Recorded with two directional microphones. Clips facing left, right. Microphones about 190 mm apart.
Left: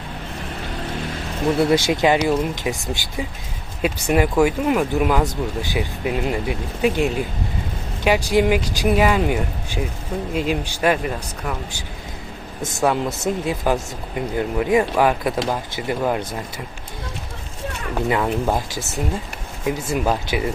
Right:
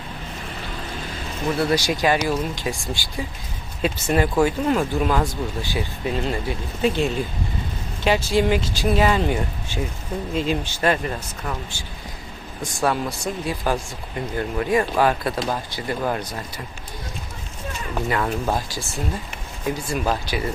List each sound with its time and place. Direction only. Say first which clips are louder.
1.5 s speech: left 4 dB; 25° left (ahead or behind); by 11.5 s 5° left (ahead or behind)
12.6 s speech: left 3 dB; 20° left (ahead or behind)
18.1 s speech: left 3 dB; 15° left (ahead or behind)